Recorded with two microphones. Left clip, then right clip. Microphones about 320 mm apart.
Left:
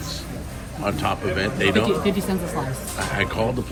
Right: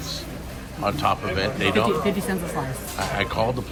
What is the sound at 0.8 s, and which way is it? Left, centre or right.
Speech, centre.